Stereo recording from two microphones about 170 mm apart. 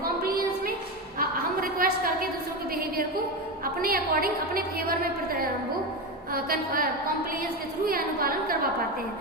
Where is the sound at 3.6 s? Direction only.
60° right (ahead or behind).